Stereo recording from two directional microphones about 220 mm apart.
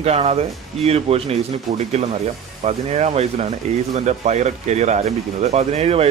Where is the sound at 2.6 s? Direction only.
30° right (ahead or behind).